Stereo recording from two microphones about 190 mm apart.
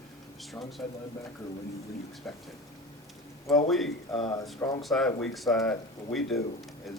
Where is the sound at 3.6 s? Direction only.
Centre (ahead or behind).